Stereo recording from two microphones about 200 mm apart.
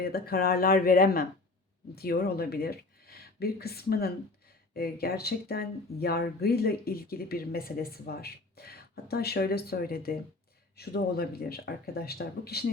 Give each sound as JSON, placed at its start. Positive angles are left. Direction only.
{"t": 0.0, "sound": "speech", "side_deg": 50}